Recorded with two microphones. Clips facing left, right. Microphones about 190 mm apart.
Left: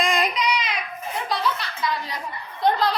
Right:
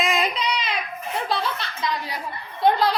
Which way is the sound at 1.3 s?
30° right (ahead or behind).